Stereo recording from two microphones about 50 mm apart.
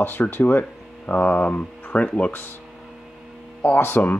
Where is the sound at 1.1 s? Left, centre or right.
Left.